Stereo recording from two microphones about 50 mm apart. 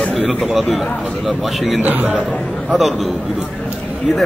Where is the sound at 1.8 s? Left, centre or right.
Right.